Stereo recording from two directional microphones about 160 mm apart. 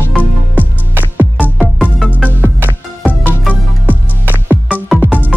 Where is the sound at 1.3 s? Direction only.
Centre (ahead or behind).